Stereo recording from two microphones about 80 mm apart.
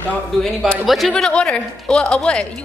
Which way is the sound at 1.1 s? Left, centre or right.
Centre.